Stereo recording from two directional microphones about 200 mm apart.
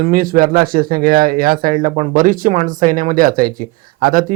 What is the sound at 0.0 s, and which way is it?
A man's voice, 45° right (ahead or behind).